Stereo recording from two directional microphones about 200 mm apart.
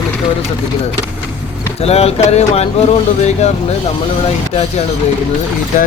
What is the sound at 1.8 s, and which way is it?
Speech, 30° left (ahead or behind).